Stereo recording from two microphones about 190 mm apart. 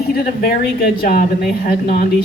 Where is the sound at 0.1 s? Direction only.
55° left (ahead or behind).